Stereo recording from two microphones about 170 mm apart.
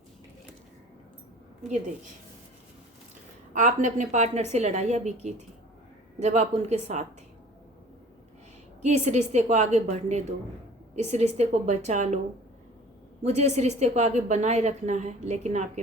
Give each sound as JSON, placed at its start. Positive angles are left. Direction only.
{"t": 3.5, "sound": "a woman's voice", "side_deg": -45}
{"t": 8.8, "sound": "a woman's voice", "side_deg": -40}
{"t": 13.2, "sound": "a woman's voice", "side_deg": -40}